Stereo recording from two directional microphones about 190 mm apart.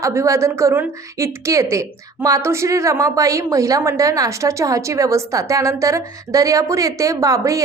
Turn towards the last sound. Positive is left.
turn(degrees=-15)  # may be behind; listen again after turning